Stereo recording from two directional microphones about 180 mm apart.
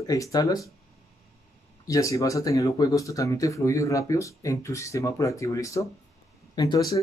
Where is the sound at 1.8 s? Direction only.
15° left (ahead or behind).